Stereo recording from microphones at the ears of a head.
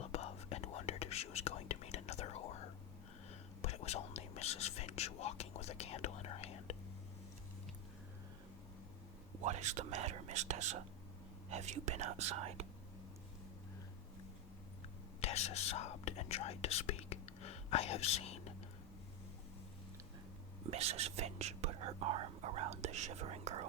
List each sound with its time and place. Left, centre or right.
0.0 s whispering: left
9.4 s whispering: right
15.2 s whispering: left
20.7 s whispering: right